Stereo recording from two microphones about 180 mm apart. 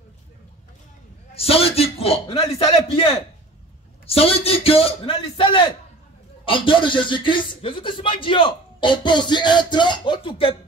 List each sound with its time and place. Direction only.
1.3 s a man's voice: 35° left (ahead or behind)